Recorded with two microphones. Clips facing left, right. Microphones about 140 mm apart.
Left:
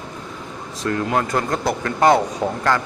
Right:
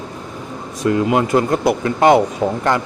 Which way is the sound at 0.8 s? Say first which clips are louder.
Right 5 dB; 15° right (ahead or behind).